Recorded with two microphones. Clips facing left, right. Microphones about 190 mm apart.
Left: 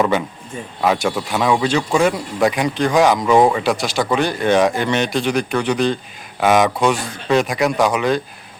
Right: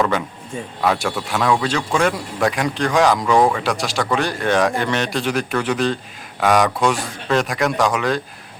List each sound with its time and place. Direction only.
0.8 s speech: centre (ahead or behind)
3.2 s speech: 20° left (ahead or behind)
3.6 s speech: centre (ahead or behind)